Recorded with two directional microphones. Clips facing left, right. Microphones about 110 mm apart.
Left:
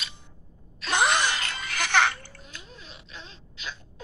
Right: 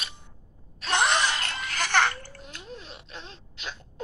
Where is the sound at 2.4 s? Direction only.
55° right (ahead or behind).